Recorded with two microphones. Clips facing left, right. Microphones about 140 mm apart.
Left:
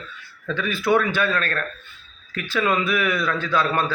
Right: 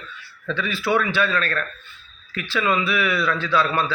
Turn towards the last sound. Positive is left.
turn(degrees=45)  # may be behind; listen again after turning